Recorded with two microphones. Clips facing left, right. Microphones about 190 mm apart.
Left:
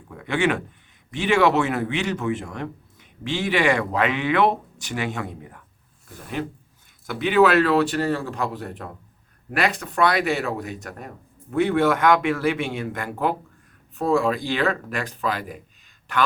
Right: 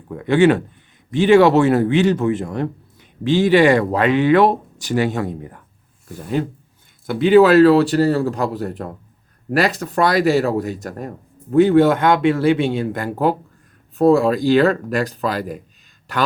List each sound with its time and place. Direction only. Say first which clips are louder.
0.1 s a man's voice: right 9 dB; 35° right (ahead or behind)
7.1 s a man's voice: right 7 dB; 30° right (ahead or behind)